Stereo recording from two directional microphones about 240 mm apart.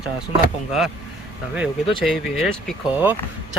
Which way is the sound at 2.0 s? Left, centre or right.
Centre.